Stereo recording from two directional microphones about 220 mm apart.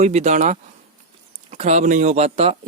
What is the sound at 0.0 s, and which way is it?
Speech, 30° right (ahead or behind).